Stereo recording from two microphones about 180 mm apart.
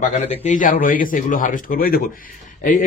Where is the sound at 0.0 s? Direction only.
40° left (ahead or behind).